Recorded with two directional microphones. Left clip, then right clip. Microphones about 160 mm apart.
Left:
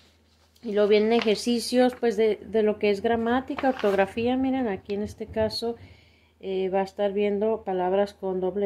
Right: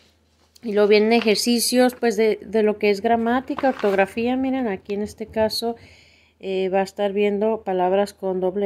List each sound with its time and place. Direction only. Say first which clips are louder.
0.7 s speech: right 5 dB; 45° right (ahead or behind)